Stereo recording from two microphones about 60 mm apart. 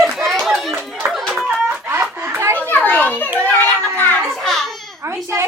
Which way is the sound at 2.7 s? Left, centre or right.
Left.